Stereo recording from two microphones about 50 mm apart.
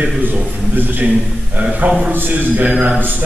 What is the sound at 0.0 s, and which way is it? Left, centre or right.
A man's voice, right.